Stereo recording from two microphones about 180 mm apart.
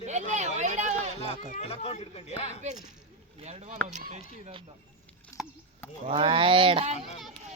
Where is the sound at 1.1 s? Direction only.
35° left (ahead or behind).